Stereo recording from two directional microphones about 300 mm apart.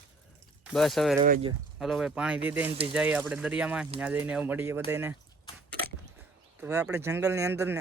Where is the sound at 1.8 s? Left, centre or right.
Centre.